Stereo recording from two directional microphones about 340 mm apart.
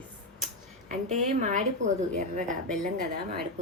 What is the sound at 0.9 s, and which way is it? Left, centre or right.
A woman's voice, right.